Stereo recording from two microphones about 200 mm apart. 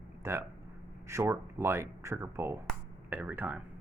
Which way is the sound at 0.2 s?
10° right (ahead or behind).